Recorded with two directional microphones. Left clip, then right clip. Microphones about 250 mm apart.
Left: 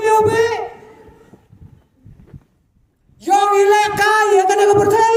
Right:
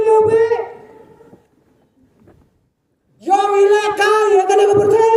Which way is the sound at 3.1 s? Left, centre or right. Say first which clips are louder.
Even; left.